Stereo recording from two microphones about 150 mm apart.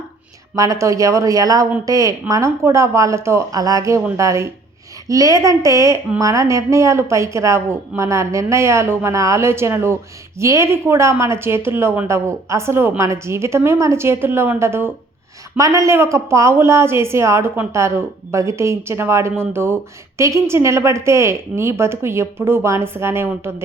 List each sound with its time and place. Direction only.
0.5 s a woman's voice: 20° right (ahead or behind)